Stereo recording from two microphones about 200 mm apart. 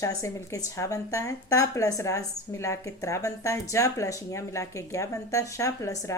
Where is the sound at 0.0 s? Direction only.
15° left (ahead or behind).